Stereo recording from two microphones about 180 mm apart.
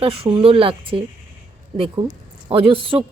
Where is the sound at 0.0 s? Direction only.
30° right (ahead or behind).